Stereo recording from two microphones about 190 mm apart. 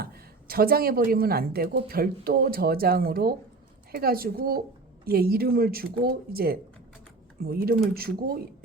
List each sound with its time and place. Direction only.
0.0 s a woman's voice: 50° right (ahead or behind)